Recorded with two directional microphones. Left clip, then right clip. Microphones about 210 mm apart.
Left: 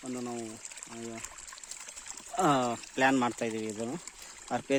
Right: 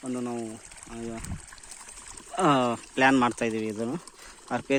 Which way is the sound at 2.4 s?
5° left (ahead or behind).